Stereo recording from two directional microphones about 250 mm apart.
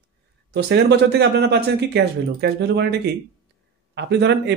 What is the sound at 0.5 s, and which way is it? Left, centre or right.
Speech, right.